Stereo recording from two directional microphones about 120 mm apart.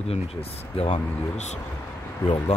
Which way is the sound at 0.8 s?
60° left (ahead or behind).